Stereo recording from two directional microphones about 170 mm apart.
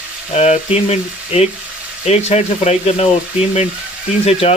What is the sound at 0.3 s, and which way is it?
Speech, 40° left (ahead or behind).